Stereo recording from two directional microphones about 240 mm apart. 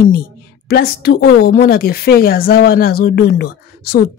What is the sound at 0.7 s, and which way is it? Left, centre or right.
Speech, left.